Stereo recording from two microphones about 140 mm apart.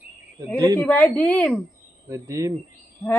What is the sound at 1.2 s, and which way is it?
Speech, 10° left (ahead or behind).